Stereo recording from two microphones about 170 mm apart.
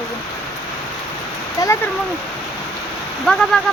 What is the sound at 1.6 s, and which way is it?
Speech, 15° left (ahead or behind).